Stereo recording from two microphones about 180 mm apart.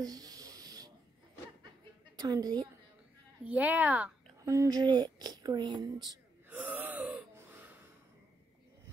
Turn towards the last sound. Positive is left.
turn(degrees=-10)  # may be behind; listen again after turning